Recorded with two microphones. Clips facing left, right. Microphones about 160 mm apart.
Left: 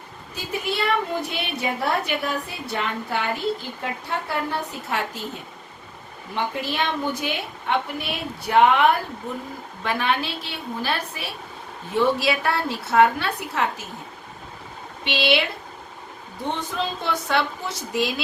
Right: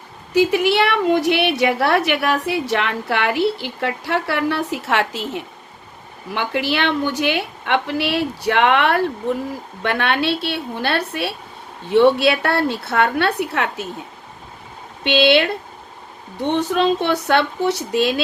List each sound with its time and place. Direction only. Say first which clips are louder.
0.3 s a woman's voice: right 12 dB; 90° right
9.8 s a woman's voice: right 5 dB; 70° right (ahead or behind)
15.0 s a woman's voice: right 7 dB; 65° right (ahead or behind)